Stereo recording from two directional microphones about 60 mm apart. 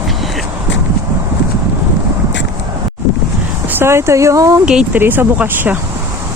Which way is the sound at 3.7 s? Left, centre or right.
Right.